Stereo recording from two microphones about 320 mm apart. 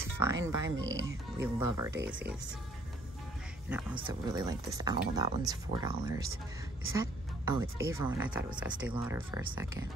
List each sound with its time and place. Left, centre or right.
0.0 s music: centre
0.5 s speech: centre
0.7 s speech: right
1.0 s speech: centre
3.6 s speech: centre
6.9 s music: centre
7.9 s speech: centre